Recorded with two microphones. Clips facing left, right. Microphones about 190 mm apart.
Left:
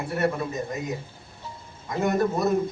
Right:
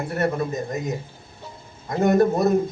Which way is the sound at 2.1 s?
45° right (ahead or behind).